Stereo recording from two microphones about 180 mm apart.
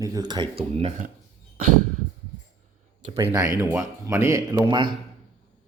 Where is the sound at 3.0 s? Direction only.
35° right (ahead or behind).